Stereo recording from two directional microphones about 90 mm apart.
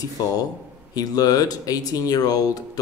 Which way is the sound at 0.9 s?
45° left (ahead or behind).